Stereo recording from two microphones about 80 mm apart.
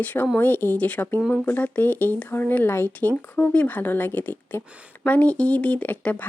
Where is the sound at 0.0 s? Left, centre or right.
Left.